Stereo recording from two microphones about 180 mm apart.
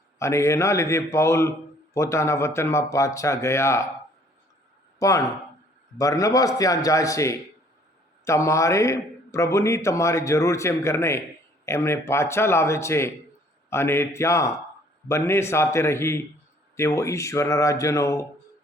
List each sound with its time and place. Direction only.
0.2 s a man's voice: 15° left (ahead or behind)
4.9 s a man's voice: 15° left (ahead or behind)